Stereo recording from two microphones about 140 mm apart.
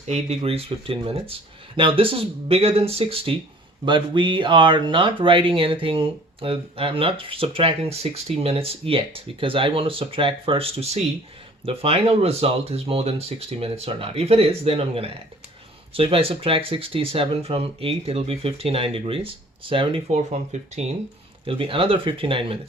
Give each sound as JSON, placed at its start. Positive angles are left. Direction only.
{"t": 0.1, "sound": "speech", "side_deg": -50}
{"t": 21.4, "sound": "speech", "side_deg": -40}